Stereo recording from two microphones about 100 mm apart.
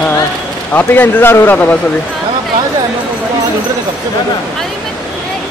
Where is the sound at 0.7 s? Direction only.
20° left (ahead or behind).